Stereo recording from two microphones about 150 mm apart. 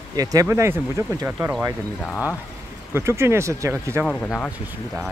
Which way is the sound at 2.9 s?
20° right (ahead or behind).